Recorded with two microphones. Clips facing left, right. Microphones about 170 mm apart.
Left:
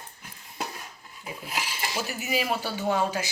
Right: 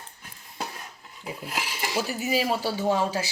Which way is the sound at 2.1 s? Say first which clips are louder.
Right 2 dB; 30° right (ahead or behind).